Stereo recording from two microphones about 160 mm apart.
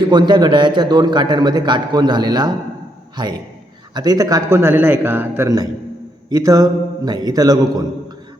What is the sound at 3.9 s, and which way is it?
A man's voice, 25° right (ahead or behind).